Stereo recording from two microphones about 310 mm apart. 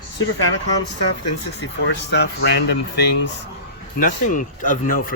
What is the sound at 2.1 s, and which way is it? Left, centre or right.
Speech, left.